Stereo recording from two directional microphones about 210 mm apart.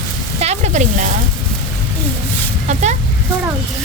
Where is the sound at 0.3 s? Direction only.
30° right (ahead or behind).